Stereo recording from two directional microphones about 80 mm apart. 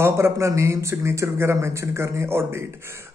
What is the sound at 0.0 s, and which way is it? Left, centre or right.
Speech, right.